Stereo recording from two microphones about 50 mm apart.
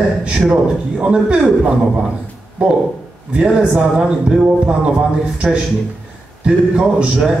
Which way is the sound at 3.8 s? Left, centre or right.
Right.